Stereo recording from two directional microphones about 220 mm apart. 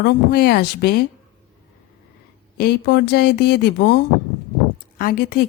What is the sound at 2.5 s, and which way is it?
Speech, 45° left (ahead or behind).